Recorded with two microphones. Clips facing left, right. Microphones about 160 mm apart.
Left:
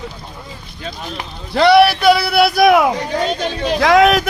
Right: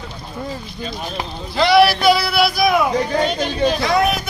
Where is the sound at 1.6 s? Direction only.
60° left (ahead or behind).